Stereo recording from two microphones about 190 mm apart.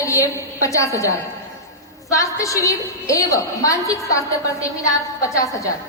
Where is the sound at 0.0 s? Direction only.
15° left (ahead or behind).